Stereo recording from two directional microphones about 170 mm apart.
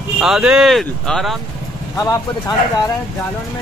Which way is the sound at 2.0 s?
20° left (ahead or behind).